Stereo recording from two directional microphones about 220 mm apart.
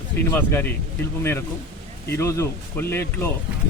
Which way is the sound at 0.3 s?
10° left (ahead or behind).